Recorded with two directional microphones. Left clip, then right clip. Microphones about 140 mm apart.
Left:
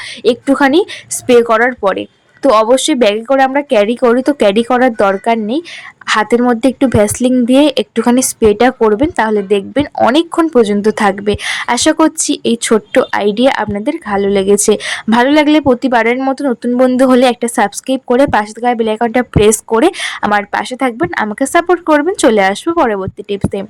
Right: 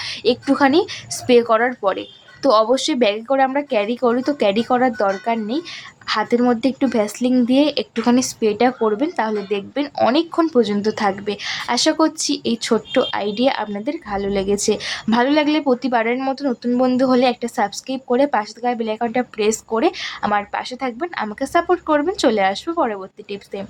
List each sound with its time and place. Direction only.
0.3 s speech: 25° left (ahead or behind)
9.8 s speech: 25° left (ahead or behind)
17.0 s speech: 40° left (ahead or behind)